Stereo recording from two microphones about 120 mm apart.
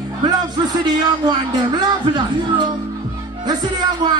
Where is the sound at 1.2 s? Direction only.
40° right (ahead or behind).